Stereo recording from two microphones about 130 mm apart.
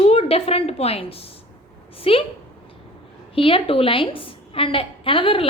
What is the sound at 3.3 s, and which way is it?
A woman's voice, 45° left (ahead or behind).